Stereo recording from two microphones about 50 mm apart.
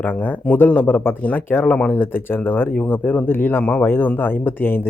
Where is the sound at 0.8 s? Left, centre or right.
Left.